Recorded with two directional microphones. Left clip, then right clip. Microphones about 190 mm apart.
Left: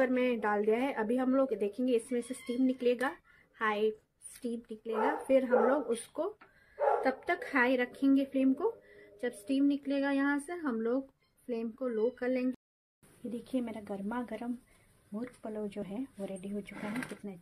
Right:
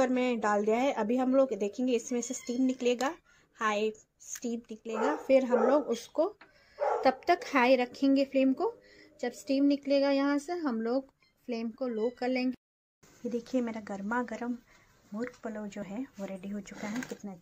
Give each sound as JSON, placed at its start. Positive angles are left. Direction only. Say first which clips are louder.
{"t": 0.0, "sound": "a woman's voice", "louder": "right 1 dB", "side_deg": -20}
{"t": 7.0, "sound": "speech", "louder": "right 5 dB", "side_deg": -30}
{"t": 13.3, "sound": "speech", "louder": "right 5 dB", "side_deg": 0}